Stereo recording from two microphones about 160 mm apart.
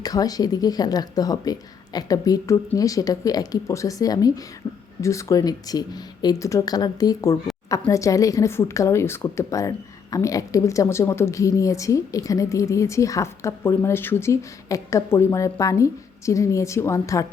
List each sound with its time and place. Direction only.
0.0 s speech: 25° left (ahead or behind)